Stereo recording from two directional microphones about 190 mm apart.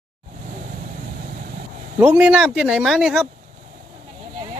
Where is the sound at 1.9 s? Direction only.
10° right (ahead or behind).